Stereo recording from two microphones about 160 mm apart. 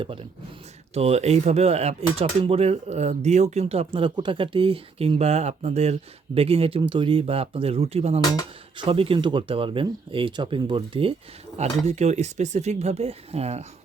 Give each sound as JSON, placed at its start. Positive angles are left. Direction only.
{"t": 0.0, "sound": "speech", "side_deg": -35}
{"t": 11.9, "sound": "speech", "side_deg": -45}